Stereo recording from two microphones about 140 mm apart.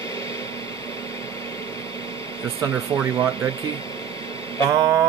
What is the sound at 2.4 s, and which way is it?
Speech, 40° right (ahead or behind).